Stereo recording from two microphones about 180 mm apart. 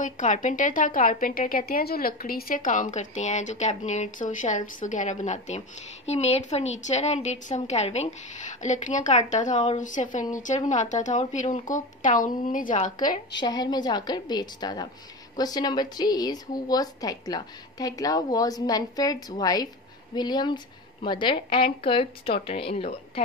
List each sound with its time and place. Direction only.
0.0 s a woman's voice: 45° left (ahead or behind)
13.4 s a woman's voice: 20° left (ahead or behind)